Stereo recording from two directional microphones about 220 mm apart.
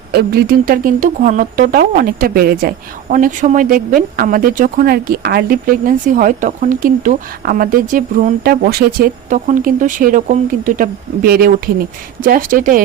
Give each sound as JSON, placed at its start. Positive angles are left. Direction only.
{"t": 0.1, "sound": "speech", "side_deg": -45}